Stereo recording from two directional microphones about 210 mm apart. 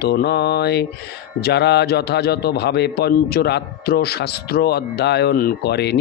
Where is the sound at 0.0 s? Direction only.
50° left (ahead or behind).